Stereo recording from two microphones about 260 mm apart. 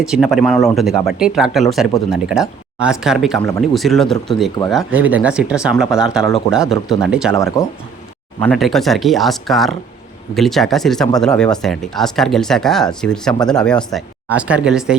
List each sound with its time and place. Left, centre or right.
0.0 s speech: centre
7.6 s speech: centre
8.4 s speech: centre